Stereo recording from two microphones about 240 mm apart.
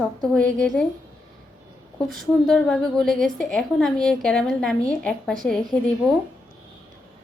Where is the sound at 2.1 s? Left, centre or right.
Centre.